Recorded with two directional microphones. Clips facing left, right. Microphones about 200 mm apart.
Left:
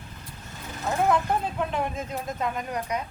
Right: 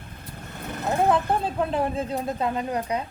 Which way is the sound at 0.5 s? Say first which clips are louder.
Right 3 dB; 60° right (ahead or behind).